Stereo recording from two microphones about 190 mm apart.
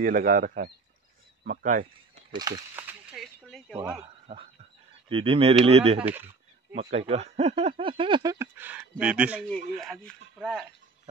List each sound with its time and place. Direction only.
0.0 s speech: 50° right (ahead or behind)
2.3 s a sound: 20° right (ahead or behind); by 3.7 s centre (ahead or behind)
3.7 s speech: 10° right (ahead or behind)
4.0 s a man's voice: 30° right (ahead or behind)
5.9 s speech: 10° right (ahead or behind)
6.7 s speech: 35° right (ahead or behind); by 10.7 s centre (ahead or behind)